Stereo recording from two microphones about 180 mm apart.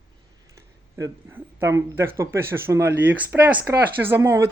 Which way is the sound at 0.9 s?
15° right (ahead or behind).